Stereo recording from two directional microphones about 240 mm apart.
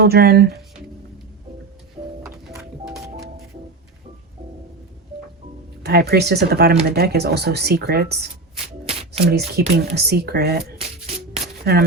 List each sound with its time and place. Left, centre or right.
0.0 s speech: right
2.0 s music: centre
5.8 s speech: right
9.0 s shuffling cards: right
9.6 s speech: right
10.8 s music: right
11.6 s speech: right